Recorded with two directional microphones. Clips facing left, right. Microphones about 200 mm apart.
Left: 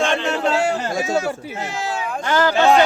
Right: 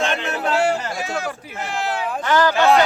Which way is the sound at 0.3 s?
30° left (ahead or behind).